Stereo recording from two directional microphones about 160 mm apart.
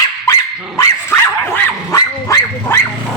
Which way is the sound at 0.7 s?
15° left (ahead or behind).